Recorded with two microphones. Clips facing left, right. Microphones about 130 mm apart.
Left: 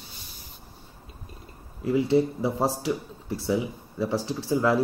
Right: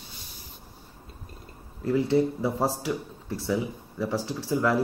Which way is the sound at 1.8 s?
15° left (ahead or behind).